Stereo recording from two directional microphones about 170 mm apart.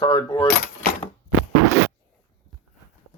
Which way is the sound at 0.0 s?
20° left (ahead or behind).